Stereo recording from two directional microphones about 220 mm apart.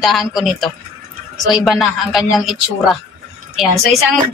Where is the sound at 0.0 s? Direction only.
Centre (ahead or behind).